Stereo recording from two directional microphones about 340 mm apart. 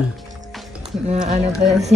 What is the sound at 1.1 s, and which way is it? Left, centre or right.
Speech, centre.